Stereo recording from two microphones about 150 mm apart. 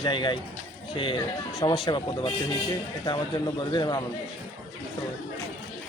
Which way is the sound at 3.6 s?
30° left (ahead or behind).